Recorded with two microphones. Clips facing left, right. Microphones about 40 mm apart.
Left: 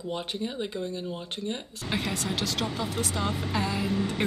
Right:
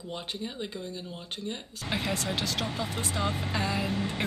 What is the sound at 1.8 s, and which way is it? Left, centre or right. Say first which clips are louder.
Speech: even; centre.